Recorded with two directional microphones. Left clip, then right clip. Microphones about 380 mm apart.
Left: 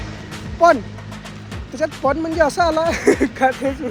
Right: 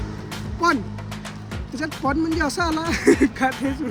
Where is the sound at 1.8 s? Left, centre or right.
Centre.